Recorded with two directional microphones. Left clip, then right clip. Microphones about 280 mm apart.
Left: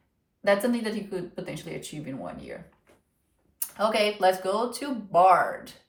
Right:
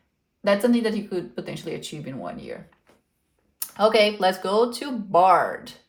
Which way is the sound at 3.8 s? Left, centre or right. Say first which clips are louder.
Right 5 dB; right.